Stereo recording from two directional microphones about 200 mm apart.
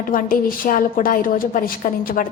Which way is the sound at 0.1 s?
45° left (ahead or behind).